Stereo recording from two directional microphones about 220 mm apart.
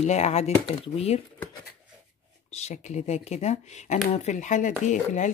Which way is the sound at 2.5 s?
30° left (ahead or behind).